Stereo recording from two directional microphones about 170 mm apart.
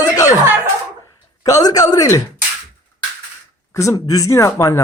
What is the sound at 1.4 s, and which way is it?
Speech, 20° left (ahead or behind).